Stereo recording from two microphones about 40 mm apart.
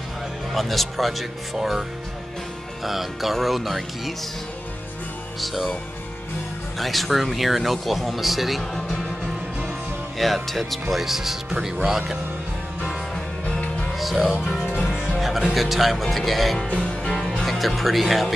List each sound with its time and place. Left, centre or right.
0.5 s speech: centre
5.4 s speech: centre
6.8 s speech: centre
10.1 s speech: centre
13.1 s music: centre
13.9 s music: centre
14.9 s speech: centre
17.1 s music: centre
17.5 s music: centre